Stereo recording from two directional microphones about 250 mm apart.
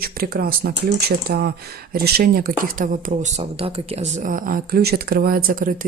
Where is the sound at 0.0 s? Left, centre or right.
Right.